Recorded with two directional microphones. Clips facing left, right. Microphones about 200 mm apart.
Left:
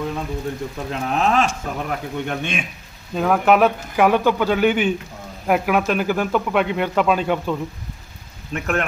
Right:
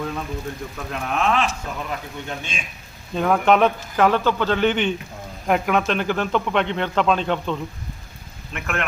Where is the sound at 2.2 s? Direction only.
60° left (ahead or behind).